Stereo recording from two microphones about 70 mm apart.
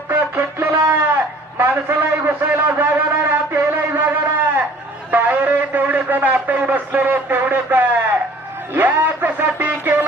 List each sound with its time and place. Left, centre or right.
0.1 s music: right
0.9 s a sound: right
8.7 s music: right